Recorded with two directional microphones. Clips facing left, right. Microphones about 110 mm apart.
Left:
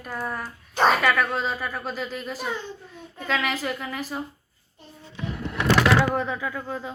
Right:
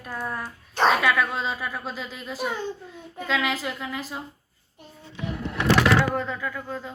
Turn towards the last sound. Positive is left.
turn(degrees=15)  # may be behind; listen again after turning